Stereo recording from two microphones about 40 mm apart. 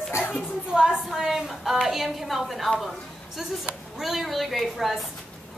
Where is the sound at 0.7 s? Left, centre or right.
Centre.